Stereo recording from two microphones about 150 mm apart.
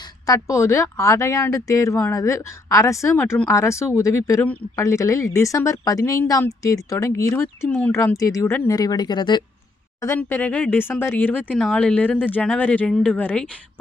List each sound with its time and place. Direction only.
0.3 s speech: 20° left (ahead or behind)
10.2 s speech: 15° left (ahead or behind)